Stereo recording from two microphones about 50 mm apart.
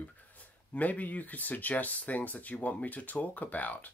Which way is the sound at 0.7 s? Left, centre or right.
Left.